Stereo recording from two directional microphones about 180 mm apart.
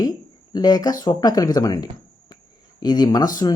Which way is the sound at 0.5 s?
20° left (ahead or behind).